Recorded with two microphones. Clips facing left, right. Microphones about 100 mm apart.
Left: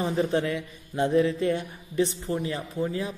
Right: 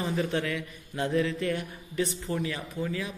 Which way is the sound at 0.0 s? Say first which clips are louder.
Left 4 dB; 25° left (ahead or behind).